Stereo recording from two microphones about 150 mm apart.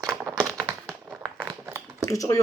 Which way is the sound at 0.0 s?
15° right (ahead or behind).